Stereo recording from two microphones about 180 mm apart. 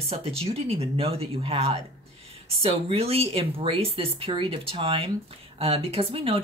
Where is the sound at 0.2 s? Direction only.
35° right (ahead or behind).